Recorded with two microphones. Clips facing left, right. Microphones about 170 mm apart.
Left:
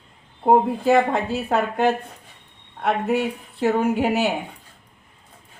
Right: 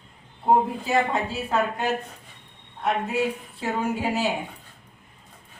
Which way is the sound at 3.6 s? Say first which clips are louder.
Left 7 dB; 70° left (ahead or behind).